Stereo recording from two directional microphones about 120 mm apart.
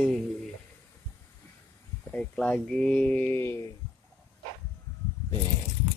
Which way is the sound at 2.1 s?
10° left (ahead or behind).